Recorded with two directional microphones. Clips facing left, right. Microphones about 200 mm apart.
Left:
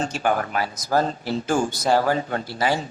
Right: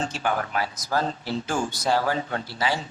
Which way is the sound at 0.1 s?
45° left (ahead or behind).